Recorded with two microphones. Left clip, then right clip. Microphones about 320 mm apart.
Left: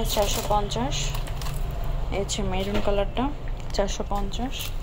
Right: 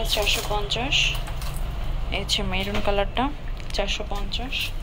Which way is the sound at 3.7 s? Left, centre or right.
Centre.